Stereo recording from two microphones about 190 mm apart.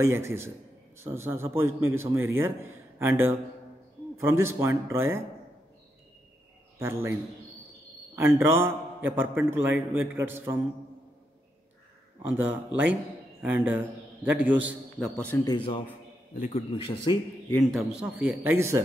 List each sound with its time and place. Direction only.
0.0 s a man's voice: 15° right (ahead or behind)
6.8 s a man's voice: 15° right (ahead or behind)
8.2 s a man's voice: 15° right (ahead or behind)
12.3 s a man's voice: 10° right (ahead or behind)
15.2 s speech: 15° left (ahead or behind)
16.3 s speech: 35° left (ahead or behind)
17.5 s a man's voice: 5° left (ahead or behind)
18.1 s a man's voice: 10° right (ahead or behind)